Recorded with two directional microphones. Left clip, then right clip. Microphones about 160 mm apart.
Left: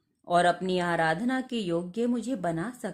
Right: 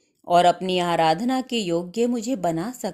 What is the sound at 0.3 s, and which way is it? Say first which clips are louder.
A woman's voice: right 6 dB; 30° right (ahead or behind).